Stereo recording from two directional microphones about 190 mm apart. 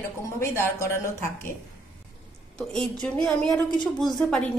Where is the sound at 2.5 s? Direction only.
5° left (ahead or behind).